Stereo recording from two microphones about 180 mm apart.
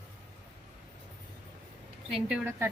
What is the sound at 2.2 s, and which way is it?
Speech, 10° right (ahead or behind).